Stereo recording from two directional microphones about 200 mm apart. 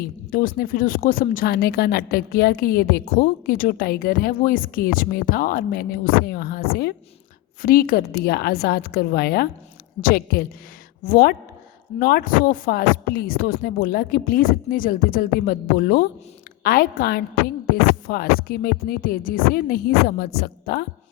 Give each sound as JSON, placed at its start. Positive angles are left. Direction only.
{"t": 0.0, "sound": "speech", "side_deg": 45}